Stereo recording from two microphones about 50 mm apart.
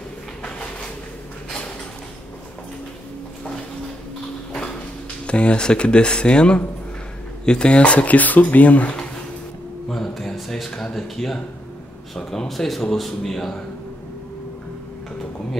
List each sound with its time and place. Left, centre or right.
0.4 s a sound: left
4.5 s sliding door: centre
5.2 s speech: left
9.8 s music: centre
10.7 s a man's voice: centre